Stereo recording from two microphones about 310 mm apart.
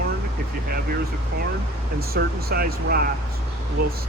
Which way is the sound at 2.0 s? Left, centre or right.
Right.